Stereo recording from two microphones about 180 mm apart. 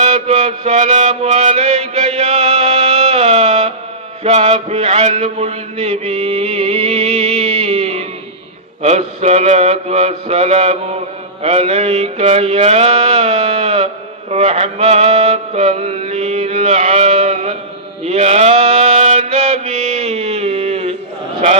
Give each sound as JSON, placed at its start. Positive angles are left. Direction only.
{"t": 0.0, "sound": "mantra", "side_deg": -35}